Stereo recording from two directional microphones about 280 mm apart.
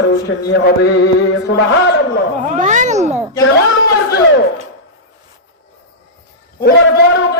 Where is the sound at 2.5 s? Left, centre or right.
Right.